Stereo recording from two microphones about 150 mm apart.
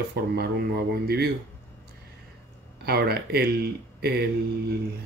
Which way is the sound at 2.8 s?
90° right.